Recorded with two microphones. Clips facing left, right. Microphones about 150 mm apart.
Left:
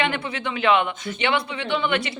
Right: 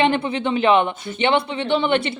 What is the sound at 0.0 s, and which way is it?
Speech, 25° right (ahead or behind).